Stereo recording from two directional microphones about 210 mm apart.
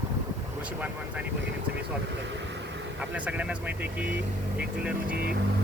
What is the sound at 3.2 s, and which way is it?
Speech, 5° right (ahead or behind).